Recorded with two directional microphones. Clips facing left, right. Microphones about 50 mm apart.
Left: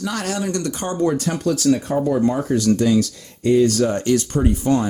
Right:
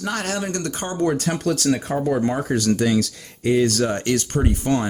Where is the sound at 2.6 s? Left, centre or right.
Right.